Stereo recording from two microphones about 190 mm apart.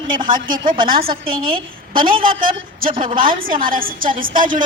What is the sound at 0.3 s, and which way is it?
A woman's voice, 45° right (ahead or behind).